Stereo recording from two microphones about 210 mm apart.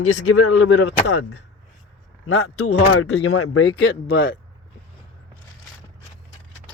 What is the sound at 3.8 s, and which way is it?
Speech, 45° left (ahead or behind).